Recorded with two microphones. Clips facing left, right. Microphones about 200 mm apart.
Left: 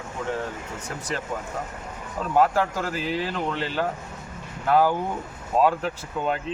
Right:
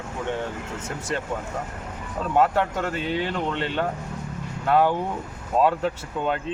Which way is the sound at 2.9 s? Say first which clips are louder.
Right 1 dB; centre (ahead or behind).